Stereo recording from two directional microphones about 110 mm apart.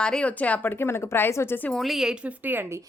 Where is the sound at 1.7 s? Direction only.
Centre (ahead or behind).